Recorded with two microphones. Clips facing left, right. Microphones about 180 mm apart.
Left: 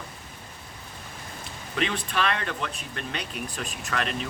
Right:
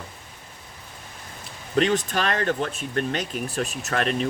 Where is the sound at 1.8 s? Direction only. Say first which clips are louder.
Right 6 dB; 40° right (ahead or behind).